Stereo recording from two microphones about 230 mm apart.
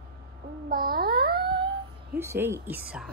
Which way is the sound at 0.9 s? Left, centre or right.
Right.